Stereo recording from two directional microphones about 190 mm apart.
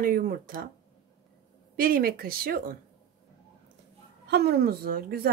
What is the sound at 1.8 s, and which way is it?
A woman's voice, 50° right (ahead or behind).